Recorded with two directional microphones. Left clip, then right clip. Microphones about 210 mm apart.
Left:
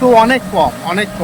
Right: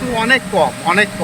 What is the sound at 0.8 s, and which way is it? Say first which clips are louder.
Speech: right 4 dB; 10° left (ahead or behind).